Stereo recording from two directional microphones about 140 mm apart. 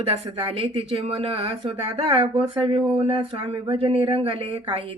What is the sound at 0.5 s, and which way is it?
Speech, 40° right (ahead or behind).